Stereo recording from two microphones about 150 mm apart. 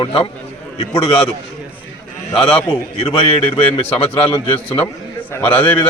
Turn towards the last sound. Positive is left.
turn(degrees=10)  # may be behind; listen again after turning